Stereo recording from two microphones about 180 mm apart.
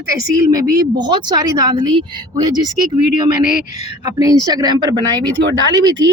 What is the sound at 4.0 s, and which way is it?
A woman's voice, 20° right (ahead or behind).